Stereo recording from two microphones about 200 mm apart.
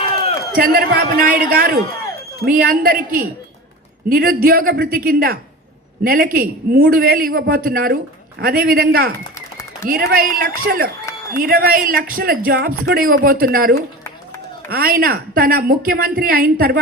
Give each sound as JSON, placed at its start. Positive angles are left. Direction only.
{"t": 0.5, "sound": "a woman's voice", "side_deg": -50}